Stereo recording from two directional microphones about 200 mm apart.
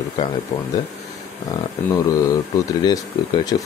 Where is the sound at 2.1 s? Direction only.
15° left (ahead or behind).